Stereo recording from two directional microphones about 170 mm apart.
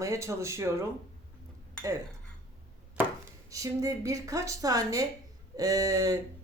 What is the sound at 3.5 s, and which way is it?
A woman's voice, 20° right (ahead or behind).